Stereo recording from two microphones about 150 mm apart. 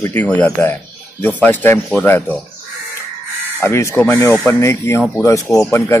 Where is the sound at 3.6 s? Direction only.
15° left (ahead or behind).